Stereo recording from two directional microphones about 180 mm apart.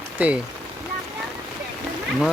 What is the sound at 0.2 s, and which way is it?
Speech, 5° right (ahead or behind).